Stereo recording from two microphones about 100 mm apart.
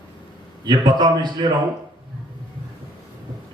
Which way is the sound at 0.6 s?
45° right (ahead or behind).